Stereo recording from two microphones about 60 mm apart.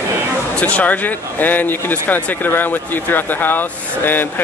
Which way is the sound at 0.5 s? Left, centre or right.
Left.